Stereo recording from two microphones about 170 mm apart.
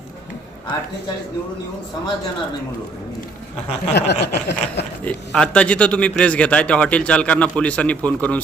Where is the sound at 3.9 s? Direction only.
85° left.